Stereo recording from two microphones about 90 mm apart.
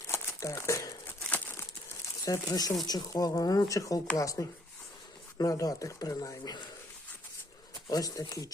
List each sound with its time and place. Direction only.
0.1 s crumpling: 30° left (ahead or behind)
2.2 s speech: 40° left (ahead or behind)
7.9 s speech: 40° left (ahead or behind)